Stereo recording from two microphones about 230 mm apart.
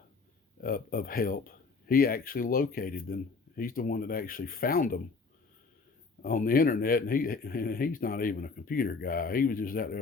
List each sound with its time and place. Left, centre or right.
0.6 s speech: left
6.2 s speech: left